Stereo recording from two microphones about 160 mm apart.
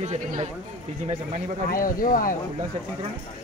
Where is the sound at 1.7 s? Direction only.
60° left (ahead or behind).